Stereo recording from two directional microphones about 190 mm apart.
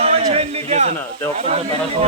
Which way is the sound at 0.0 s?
30° right (ahead or behind).